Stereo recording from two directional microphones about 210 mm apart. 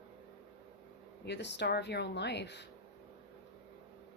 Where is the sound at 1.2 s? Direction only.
55° left (ahead or behind).